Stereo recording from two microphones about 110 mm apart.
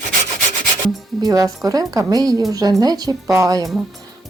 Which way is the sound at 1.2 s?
35° right (ahead or behind).